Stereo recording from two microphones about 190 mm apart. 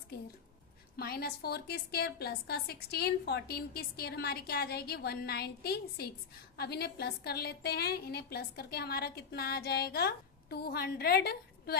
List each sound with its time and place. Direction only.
0.9 s a woman's voice: 55° left (ahead or behind)